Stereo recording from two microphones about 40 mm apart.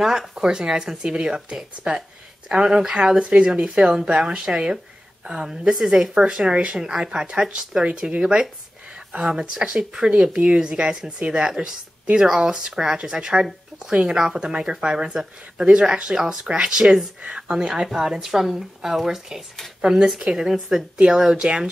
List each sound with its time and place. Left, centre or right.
0.0 s speech: centre
0.4 s speech: centre
6.8 s speech: centre
11.3 s speech: centre